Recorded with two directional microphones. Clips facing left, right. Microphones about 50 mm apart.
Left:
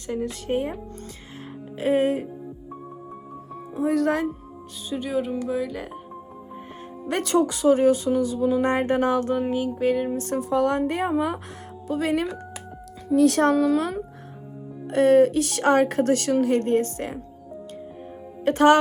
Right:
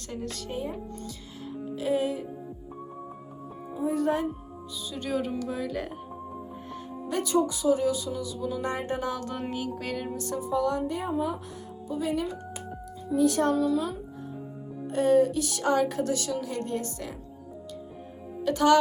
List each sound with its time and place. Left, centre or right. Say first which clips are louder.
0.1 s music: left 8 dB; centre
0.5 s speech: left 9 dB; left
1.8 s speech: left 6 dB; left
3.8 s speech: left 5 dB; left
4.9 s music: left 4 dB; centre
5.5 s speech: left 4 dB; centre
7.1 s speech: left 4 dB; left
9.3 s a sound: left 8 dB; centre
10.2 s speech: left 6 dB; left
10.5 s speech: left 5 dB; left
14.9 s speech: left 6 dB; left
18.4 s speech: left 5 dB; left